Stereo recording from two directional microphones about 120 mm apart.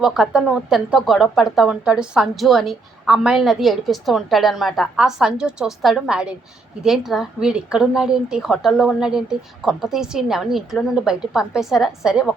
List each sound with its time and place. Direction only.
0.0 s speech: 5° right (ahead or behind)